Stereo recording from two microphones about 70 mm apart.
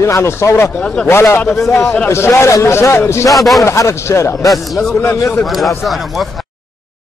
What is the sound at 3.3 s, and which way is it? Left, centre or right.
Speech, centre.